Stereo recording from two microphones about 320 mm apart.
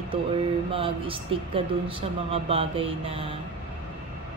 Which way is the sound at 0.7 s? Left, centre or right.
Centre.